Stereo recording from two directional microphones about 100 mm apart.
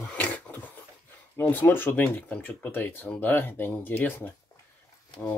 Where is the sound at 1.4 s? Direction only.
20° left (ahead or behind).